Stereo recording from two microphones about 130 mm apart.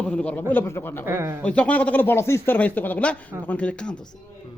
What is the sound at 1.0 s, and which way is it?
Speech, 20° right (ahead or behind).